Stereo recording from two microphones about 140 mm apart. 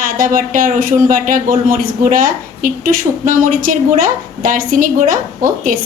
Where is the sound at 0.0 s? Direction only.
75° right (ahead or behind).